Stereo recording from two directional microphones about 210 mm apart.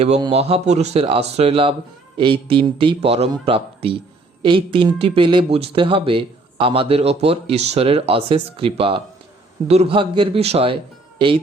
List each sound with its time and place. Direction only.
0.0 s speech: 30° right (ahead or behind)